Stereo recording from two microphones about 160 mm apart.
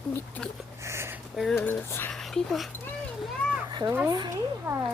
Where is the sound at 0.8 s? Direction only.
15° right (ahead or behind).